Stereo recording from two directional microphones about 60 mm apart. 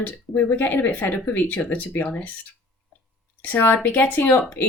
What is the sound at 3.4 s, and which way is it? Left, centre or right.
Speech, left.